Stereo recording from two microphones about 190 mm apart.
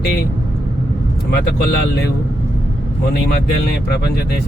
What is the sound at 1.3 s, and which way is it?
Speech, 60° left (ahead or behind).